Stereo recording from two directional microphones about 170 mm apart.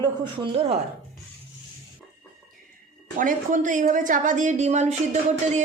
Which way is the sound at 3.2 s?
50° right (ahead or behind).